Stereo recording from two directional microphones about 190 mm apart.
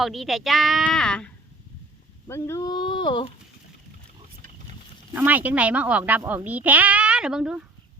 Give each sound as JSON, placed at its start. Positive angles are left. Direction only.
{"t": 0.0, "sound": "a woman's voice", "side_deg": 0}
{"t": 2.2, "sound": "speech", "side_deg": 15}
{"t": 5.1, "sound": "speech", "side_deg": -10}